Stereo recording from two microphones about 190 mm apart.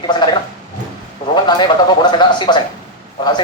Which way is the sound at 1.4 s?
25° left (ahead or behind).